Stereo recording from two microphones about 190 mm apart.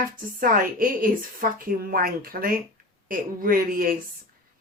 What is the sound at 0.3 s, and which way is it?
A woman's voice, 45° right (ahead or behind).